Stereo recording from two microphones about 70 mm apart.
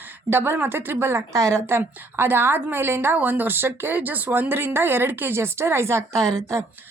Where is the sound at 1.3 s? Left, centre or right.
Right.